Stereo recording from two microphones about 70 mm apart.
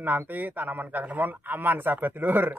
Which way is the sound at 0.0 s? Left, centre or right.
Right.